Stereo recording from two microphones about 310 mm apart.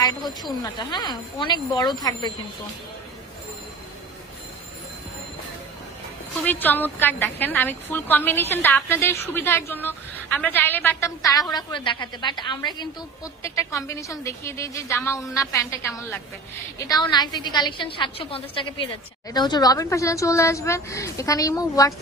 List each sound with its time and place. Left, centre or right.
0.2 s speech: centre
0.6 s a woman's voice: centre
6.4 s a woman's voice: centre